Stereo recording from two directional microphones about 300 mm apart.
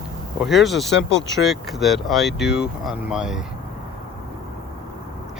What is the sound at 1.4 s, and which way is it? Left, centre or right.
Speech, centre.